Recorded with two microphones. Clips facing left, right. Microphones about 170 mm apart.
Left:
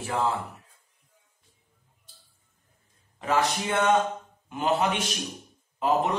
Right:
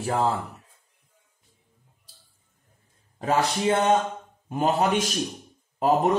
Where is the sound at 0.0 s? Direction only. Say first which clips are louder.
Right 3 dB; 35° right (ahead or behind).